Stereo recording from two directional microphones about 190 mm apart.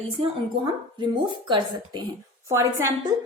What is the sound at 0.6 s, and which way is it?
A woman's voice, 25° right (ahead or behind).